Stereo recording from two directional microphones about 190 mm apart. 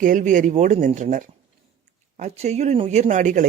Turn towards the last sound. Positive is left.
turn(degrees=-40)  # may be behind; listen again after turning